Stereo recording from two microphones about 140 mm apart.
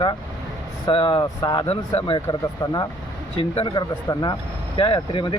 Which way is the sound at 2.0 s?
40° left (ahead or behind).